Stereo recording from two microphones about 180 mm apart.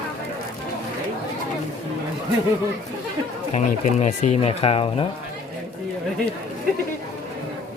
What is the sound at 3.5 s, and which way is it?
Speech, 40° left (ahead or behind).